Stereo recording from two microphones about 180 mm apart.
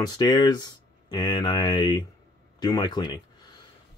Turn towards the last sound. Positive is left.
turn(degrees=25)  # may be behind; listen again after turning